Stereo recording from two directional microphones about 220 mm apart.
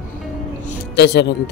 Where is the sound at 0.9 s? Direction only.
50° left (ahead or behind).